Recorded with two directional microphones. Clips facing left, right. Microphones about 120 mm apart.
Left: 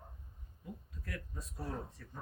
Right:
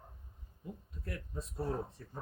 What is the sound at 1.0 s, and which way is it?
Speech, 25° right (ahead or behind).